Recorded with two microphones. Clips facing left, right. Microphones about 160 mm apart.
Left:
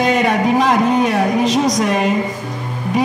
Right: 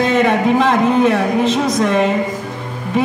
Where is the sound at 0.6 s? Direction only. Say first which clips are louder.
Right 2 dB; 10° left (ahead or behind).